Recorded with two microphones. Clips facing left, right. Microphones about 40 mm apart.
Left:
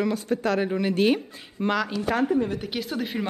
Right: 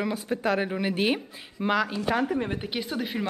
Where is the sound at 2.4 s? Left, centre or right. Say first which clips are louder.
Left 3 dB; right.